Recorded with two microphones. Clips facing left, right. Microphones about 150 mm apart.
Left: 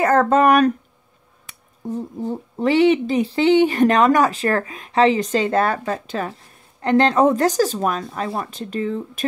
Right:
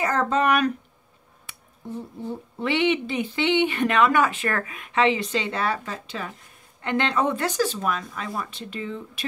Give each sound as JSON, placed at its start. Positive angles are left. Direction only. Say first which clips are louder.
{"t": 0.0, "sound": "speech", "louder": "left 7 dB", "side_deg": 55}
{"t": 1.9, "sound": "speech", "louder": "left 7 dB", "side_deg": 40}
{"t": 6.8, "sound": "speech", "louder": "left 8 dB", "side_deg": 35}
{"t": 8.5, "sound": "speech", "louder": "left 8 dB", "side_deg": 40}